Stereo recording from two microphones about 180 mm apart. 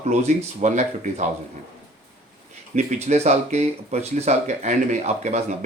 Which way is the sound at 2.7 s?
40° right (ahead or behind).